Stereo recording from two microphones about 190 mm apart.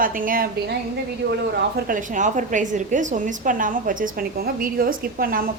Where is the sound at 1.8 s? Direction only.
45° right (ahead or behind).